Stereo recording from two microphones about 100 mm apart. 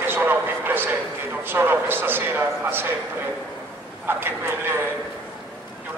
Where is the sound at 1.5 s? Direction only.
20° right (ahead or behind).